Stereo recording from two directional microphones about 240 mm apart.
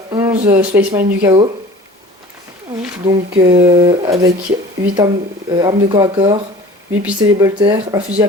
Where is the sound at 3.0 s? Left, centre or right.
Right.